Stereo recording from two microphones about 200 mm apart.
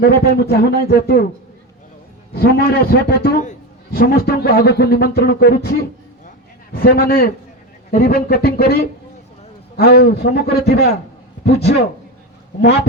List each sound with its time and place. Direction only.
0.0 s a man's voice: 50° left (ahead or behind)
2.3 s a man's voice: 50° left (ahead or behind)
6.7 s a man's voice: 50° left (ahead or behind)